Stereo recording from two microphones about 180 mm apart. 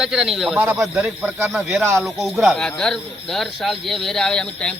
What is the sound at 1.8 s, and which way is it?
Speech, 15° right (ahead or behind).